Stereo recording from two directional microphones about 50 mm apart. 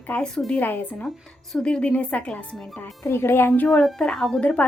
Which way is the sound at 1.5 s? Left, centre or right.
Centre.